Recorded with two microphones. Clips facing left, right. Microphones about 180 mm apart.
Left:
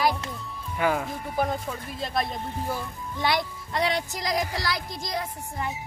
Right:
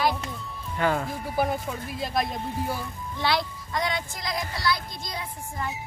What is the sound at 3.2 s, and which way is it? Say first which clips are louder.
Speech: even; 15° left (ahead or behind).